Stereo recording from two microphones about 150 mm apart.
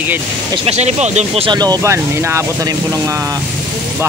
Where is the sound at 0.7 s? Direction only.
50° right (ahead or behind).